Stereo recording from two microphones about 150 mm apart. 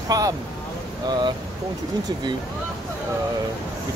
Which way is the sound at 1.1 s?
30° right (ahead or behind).